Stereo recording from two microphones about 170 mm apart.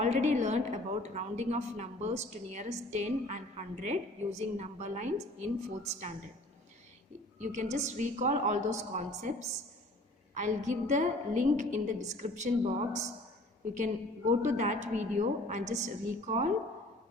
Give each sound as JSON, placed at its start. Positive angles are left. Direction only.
{"t": 0.0, "sound": "a woman's voice", "side_deg": -40}
{"t": 7.3, "sound": "a woman's voice", "side_deg": -45}